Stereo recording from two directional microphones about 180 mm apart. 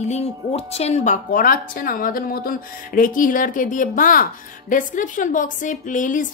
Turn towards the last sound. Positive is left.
turn(degrees=45)  # may be behind; listen again after turning